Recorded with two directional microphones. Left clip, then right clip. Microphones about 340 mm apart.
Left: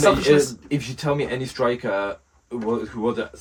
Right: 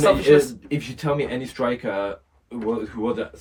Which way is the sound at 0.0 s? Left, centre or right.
Left.